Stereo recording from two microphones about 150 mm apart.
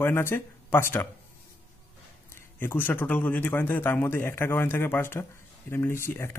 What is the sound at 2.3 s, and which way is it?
Speech, 15° left (ahead or behind).